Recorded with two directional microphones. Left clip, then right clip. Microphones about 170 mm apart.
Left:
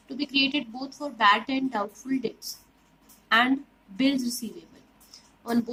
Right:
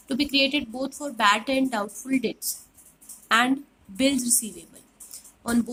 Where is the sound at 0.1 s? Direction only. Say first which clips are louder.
Right 3 dB; 25° right (ahead or behind).